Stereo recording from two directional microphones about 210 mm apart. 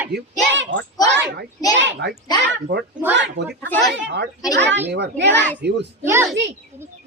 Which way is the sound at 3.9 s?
55° right (ahead or behind).